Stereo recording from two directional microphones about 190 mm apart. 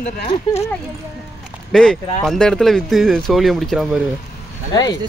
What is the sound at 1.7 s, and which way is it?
Speech, 5° left (ahead or behind).